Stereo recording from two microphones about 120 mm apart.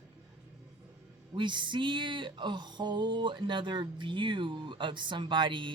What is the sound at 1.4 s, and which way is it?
Music, 40° right (ahead or behind).